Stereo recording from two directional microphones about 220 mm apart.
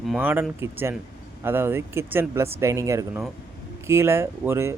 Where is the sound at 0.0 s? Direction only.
5° right (ahead or behind).